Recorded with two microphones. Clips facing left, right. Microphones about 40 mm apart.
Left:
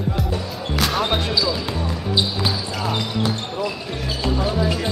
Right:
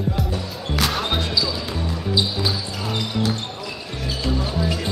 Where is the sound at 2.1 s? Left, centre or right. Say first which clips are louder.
Left 1 dB; left.